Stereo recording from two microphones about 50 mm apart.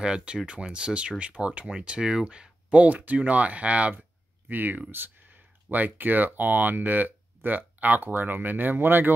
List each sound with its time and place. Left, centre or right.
0.0 s speech: centre
4.5 s speech: right